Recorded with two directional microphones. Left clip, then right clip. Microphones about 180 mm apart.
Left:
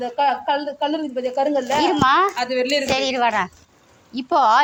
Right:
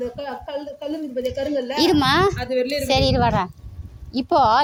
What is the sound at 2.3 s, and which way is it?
Speech, 35° right (ahead or behind).